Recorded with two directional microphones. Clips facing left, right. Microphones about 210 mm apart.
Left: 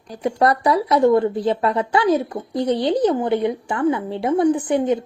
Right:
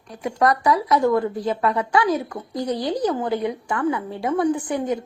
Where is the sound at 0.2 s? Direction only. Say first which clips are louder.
Left 2 dB; 30° left (ahead or behind).